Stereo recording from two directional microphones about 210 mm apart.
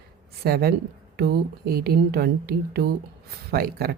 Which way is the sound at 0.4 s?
45° right (ahead or behind).